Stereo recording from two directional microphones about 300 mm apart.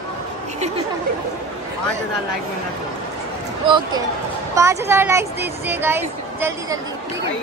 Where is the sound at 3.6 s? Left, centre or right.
Centre.